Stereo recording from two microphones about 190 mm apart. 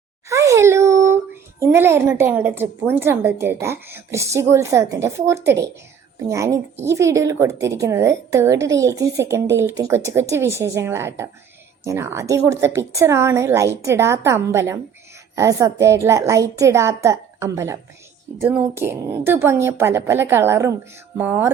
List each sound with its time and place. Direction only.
0.3 s a child's voice: 15° right (ahead or behind)